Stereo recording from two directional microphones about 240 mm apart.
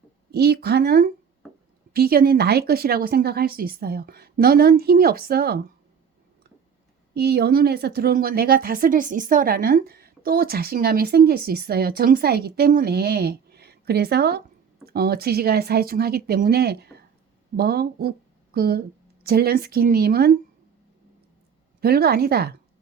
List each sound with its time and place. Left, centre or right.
0.3 s a woman's voice: right
7.1 s a woman's voice: right
21.8 s a woman's voice: right